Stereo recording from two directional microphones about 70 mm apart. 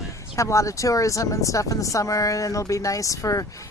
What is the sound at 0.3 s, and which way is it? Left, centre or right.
Speech, left.